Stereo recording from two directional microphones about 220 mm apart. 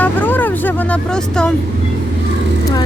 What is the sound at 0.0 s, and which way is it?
Vehicle, 10° left (ahead or behind).